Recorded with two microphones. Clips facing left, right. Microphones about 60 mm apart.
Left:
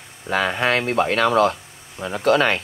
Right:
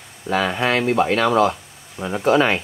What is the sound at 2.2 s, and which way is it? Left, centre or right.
Speech, left.